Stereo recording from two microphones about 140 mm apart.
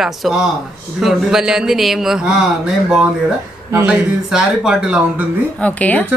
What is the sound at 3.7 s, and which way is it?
Speech, 15° right (ahead or behind).